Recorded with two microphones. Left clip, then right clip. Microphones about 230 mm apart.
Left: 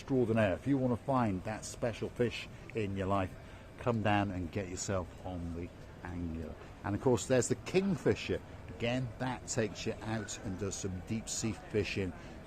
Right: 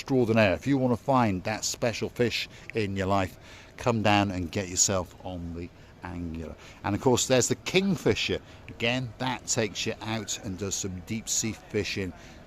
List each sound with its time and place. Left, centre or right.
0.0 s speech: right